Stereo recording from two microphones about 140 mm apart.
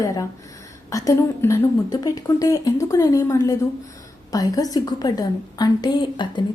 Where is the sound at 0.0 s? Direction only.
25° left (ahead or behind).